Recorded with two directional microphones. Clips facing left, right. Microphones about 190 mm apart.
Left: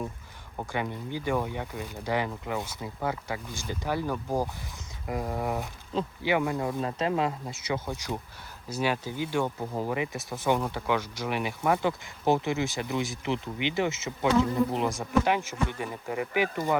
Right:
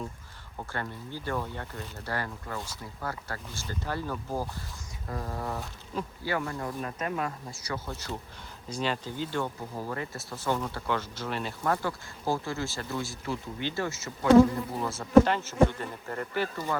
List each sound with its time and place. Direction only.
0.7 s speech: 15° left (ahead or behind)